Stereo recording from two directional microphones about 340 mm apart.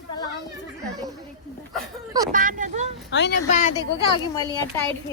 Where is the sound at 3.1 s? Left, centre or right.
Left.